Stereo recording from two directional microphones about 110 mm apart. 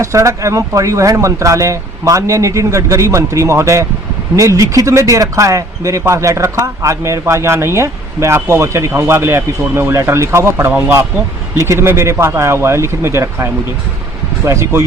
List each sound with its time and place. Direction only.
0.0 s speech: 25° right (ahead or behind)